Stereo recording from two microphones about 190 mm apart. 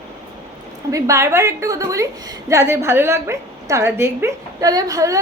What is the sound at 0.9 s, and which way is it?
A woman's voice, 15° right (ahead or behind).